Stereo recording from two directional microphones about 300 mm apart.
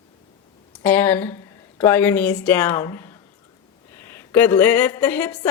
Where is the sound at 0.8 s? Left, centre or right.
Centre.